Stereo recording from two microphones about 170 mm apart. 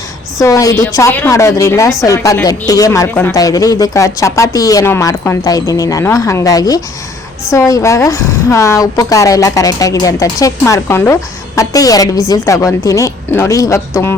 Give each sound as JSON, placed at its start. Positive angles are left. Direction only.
{"t": 0.3, "sound": "a woman's voice", "side_deg": 20}